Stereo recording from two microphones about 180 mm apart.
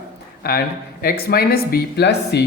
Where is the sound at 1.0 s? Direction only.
60° left (ahead or behind).